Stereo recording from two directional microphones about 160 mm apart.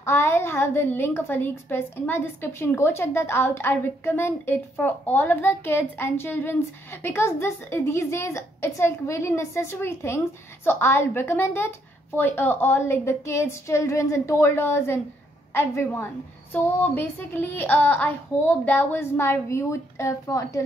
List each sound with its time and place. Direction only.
0.0 s a woman's voice: 15° left (ahead or behind)